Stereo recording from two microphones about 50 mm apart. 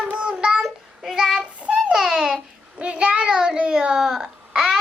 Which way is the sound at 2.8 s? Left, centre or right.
Right.